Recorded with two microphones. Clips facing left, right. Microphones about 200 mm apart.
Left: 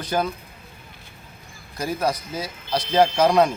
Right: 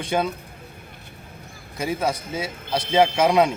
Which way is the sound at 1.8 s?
Centre (ahead or behind).